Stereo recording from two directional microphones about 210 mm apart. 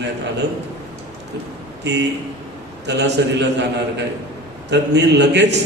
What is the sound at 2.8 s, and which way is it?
A man's voice, 55° right (ahead or behind).